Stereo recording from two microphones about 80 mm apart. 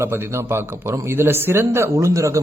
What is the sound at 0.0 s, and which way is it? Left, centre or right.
A man's voice, right.